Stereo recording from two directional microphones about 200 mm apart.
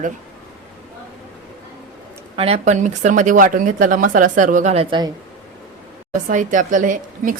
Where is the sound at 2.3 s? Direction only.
30° right (ahead or behind).